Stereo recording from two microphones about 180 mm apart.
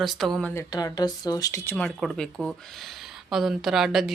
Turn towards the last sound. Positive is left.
turn(degrees=0)  # may be behind; listen again after turning